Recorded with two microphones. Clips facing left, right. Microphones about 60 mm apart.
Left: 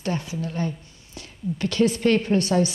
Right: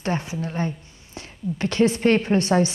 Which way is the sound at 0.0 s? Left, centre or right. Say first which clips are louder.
Right 2 dB; right.